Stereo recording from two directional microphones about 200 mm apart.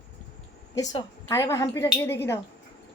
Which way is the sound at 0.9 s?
15° left (ahead or behind).